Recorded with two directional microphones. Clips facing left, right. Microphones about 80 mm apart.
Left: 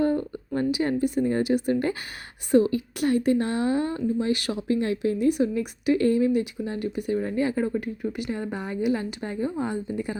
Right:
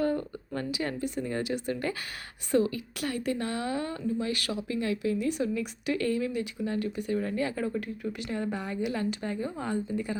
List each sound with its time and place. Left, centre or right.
0.0 s speech: left
4.7 s speech: left; by 10.2 s centre